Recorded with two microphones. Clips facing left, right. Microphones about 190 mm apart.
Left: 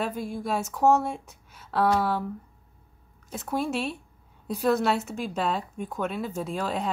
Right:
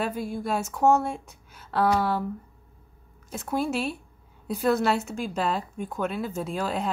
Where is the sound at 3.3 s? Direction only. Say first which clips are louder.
Right 1 dB; centre (ahead or behind).